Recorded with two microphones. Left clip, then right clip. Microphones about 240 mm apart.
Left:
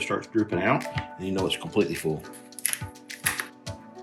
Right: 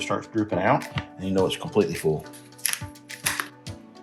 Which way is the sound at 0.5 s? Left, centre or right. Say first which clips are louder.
Right 5 dB; right.